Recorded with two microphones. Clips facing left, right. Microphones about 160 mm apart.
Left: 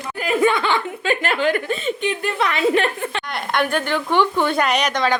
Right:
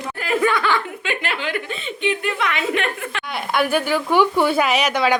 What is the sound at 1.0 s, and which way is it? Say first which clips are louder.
A woman's voice: left 6 dB; 40° left (ahead or behind).